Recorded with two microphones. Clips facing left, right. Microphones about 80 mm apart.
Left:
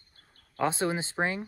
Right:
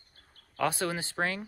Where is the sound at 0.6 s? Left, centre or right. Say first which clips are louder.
Left 2 dB; left.